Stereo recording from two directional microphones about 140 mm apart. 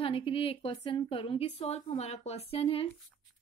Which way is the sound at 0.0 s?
40° left (ahead or behind).